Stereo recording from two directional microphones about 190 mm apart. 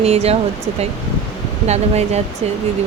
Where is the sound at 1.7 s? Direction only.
35° right (ahead or behind).